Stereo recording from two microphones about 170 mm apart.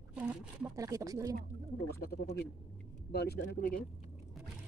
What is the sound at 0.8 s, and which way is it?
Speech, 20° right (ahead or behind).